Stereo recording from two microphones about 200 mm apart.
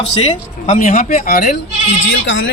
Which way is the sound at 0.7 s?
45° left (ahead or behind).